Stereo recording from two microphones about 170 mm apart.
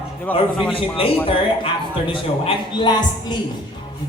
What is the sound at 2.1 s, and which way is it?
Speech, 30° left (ahead or behind).